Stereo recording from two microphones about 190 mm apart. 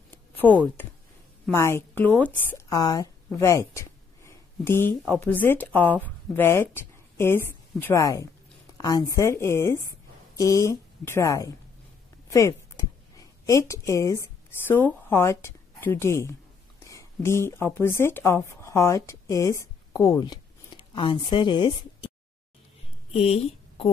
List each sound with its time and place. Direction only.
0.4 s speech: 5° right (ahead or behind)
1.5 s a woman's voice: 15° left (ahead or behind)
23.1 s speech: 35° left (ahead or behind)